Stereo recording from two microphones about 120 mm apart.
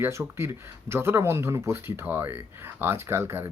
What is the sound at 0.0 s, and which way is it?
Speech, 20° right (ahead or behind).